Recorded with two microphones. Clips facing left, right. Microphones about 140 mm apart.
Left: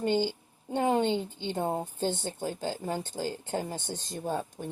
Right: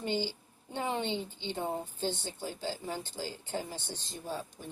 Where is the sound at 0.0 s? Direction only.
50° left (ahead or behind).